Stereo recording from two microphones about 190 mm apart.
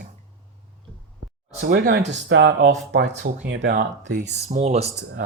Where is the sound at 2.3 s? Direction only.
70° right (ahead or behind).